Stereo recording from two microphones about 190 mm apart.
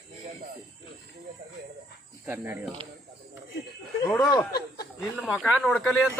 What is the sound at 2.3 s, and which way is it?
Speech, 10° right (ahead or behind).